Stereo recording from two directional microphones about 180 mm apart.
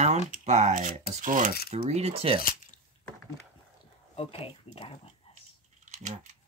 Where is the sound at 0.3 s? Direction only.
40° right (ahead or behind).